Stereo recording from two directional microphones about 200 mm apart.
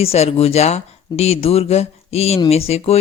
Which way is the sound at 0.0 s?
30° left (ahead or behind).